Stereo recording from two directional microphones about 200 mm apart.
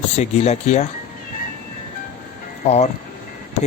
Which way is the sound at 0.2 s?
35° left (ahead or behind).